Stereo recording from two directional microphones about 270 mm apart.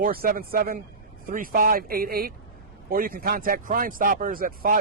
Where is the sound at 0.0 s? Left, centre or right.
Right.